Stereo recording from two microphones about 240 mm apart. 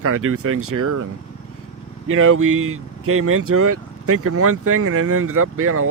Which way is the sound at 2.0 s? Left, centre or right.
Right.